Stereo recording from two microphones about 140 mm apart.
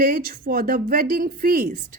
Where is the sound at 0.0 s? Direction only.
85° right.